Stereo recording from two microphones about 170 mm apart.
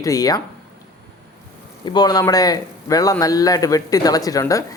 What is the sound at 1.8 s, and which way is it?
A man's voice, 25° left (ahead or behind).